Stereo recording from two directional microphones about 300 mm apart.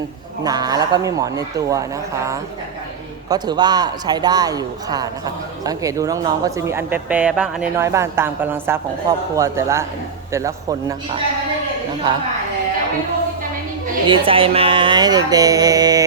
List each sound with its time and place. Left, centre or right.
0.4 s a man's voice: centre
3.2 s a man's voice: centre
13.8 s a man's voice: centre